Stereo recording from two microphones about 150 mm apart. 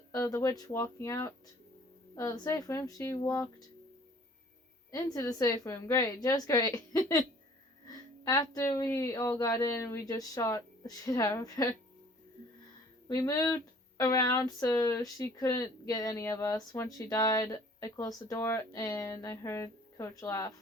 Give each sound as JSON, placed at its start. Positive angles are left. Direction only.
{"t": 0.1, "sound": "speech", "side_deg": 25}
{"t": 4.9, "sound": "speech", "side_deg": 20}
{"t": 13.1, "sound": "speech", "side_deg": 20}